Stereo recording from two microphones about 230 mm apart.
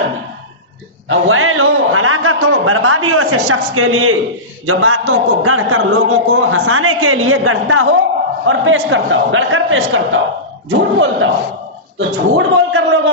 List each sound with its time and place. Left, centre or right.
1.0 s a man's voice: right